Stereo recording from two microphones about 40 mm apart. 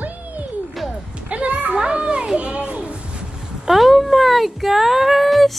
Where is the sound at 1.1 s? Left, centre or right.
Right.